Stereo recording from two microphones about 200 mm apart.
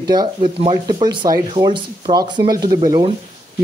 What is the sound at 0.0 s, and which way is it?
A man's voice, 20° right (ahead or behind).